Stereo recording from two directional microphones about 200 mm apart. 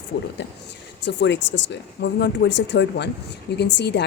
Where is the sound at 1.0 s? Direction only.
60° left (ahead or behind).